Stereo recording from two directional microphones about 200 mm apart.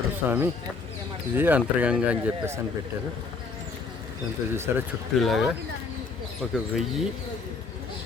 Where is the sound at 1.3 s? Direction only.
10° right (ahead or behind).